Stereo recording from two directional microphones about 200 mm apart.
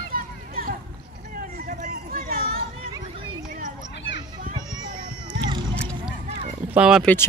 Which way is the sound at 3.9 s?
60° left (ahead or behind).